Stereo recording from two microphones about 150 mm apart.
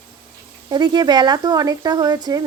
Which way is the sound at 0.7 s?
30° right (ahead or behind).